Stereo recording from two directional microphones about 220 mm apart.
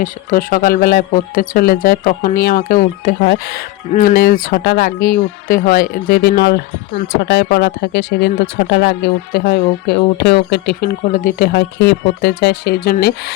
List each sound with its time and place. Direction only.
0.0 s speech: 40° left (ahead or behind)